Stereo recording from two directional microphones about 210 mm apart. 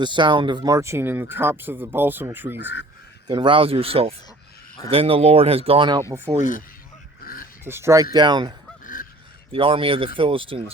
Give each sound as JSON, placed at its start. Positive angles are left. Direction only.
{"t": 0.0, "sound": "speech", "side_deg": -20}
{"t": 3.2, "sound": "speech", "side_deg": -20}
{"t": 7.2, "sound": "a sound", "side_deg": 45}
{"t": 7.6, "sound": "speech", "side_deg": -10}
{"t": 8.8, "sound": "honk", "side_deg": 40}
{"t": 9.5, "sound": "speech", "side_deg": -25}